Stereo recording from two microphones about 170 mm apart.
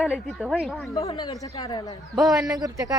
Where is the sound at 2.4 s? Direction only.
20° right (ahead or behind).